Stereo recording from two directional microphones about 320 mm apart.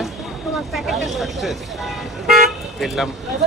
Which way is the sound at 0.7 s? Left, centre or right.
Centre.